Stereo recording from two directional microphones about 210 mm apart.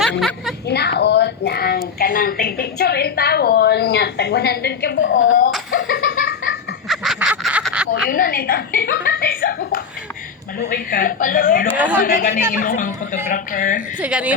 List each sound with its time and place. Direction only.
0.0 s speech: centre (ahead or behind)
0.7 s a woman's voice: 50° left (ahead or behind); by 5.4 s 65° left (ahead or behind)
5.7 s laughter: 40° left (ahead or behind)
6.8 s duck: centre (ahead or behind)
8.1 s a woman's voice: 45° left (ahead or behind)
14.0 s a woman's voice: 5° right (ahead or behind)